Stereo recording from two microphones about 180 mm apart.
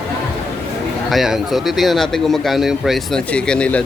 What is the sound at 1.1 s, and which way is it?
Speech, centre (ahead or behind).